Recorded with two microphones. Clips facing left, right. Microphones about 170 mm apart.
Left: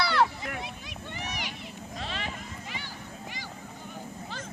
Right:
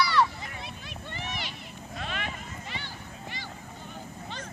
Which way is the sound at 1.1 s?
15° left (ahead or behind).